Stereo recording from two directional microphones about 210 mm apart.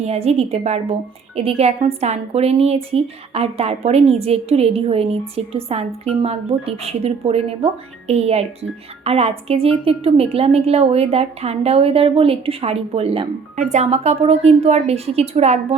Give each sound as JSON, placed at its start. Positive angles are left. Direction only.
{"t": 0.0, "sound": "a woman's voice", "side_deg": -30}